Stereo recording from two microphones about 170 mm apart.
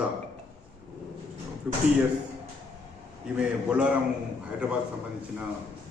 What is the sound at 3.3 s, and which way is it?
Speech, 5° right (ahead or behind).